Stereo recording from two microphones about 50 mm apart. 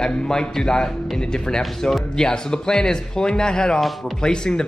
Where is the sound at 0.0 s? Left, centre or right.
Centre.